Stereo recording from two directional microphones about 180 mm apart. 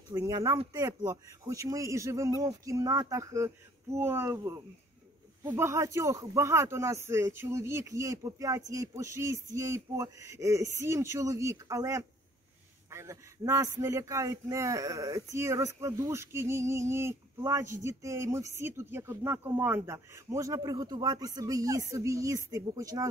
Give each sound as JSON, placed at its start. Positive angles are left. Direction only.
{"t": 0.1, "sound": "a man's voice", "side_deg": -20}